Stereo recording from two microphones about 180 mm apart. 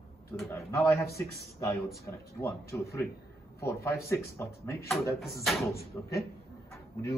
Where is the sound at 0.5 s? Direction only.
15° left (ahead or behind).